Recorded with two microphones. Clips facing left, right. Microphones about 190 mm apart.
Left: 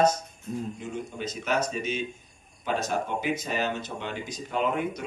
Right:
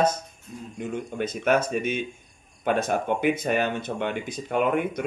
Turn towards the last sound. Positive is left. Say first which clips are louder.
# right 4 dB
turn(degrees=-60)  # may be behind; listen again after turning